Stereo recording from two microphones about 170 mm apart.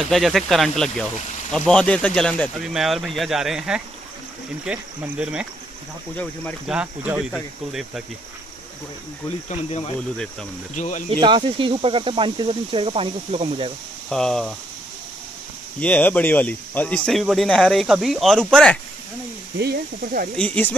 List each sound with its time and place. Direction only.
0.1 s speech: centre (ahead or behind)
4.6 s cricket: 5° right (ahead or behind)
6.7 s speech: 10° right (ahead or behind)
9.5 s speech: 40° left (ahead or behind)
9.9 s speech: 5° left (ahead or behind)
10.7 s speech: 45° left (ahead or behind)
11.1 s speech: 30° right (ahead or behind)
14.0 s speech: 5° left (ahead or behind)
15.8 s speech: 10° left (ahead or behind)
19.6 s speech: 65° right (ahead or behind)
20.3 s speech: 10° left (ahead or behind)